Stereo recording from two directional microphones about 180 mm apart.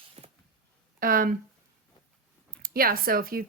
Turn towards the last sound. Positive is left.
turn(degrees=-55)  # may be behind; listen again after turning